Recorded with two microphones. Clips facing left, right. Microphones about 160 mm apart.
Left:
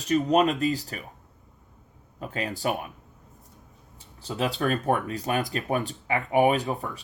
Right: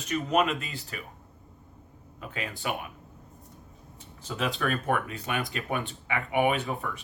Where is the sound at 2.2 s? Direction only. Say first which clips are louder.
Left 5 dB; 40° left (ahead or behind).